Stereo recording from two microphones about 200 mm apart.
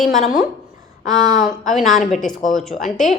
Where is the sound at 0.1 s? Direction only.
45° left (ahead or behind).